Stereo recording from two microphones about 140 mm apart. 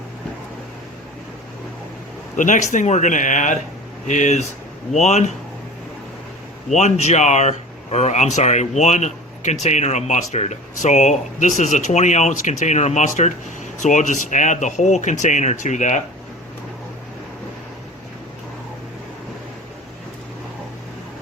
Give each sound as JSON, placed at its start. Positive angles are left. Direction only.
{"t": 2.3, "sound": "speech", "side_deg": 65}
{"t": 6.7, "sound": "speech", "side_deg": 55}